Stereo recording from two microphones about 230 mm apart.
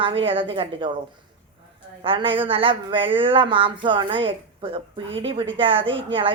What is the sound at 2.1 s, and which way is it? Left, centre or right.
Speech, right.